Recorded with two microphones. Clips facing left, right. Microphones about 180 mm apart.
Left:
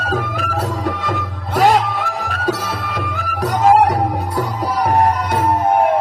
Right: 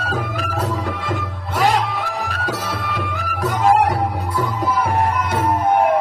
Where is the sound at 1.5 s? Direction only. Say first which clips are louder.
Left 4 dB; 45° left (ahead or behind).